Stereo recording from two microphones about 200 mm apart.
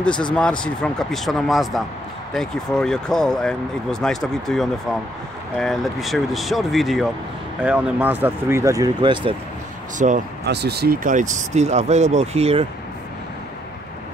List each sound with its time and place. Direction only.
0.3 s speech: 5° left (ahead or behind); by 9.3 s 25° right (ahead or behind)
9.9 s speech: 40° right (ahead or behind)
10.4 s speech: 55° right (ahead or behind); by 12.6 s 30° right (ahead or behind)